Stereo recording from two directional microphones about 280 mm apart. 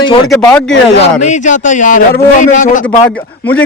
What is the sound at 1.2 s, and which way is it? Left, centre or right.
A man's voice, left.